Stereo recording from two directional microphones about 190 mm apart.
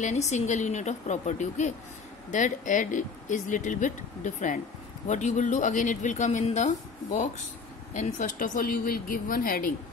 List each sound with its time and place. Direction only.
0.0 s a woman's voice: 35° left (ahead or behind)
7.9 s a woman's voice: 40° left (ahead or behind)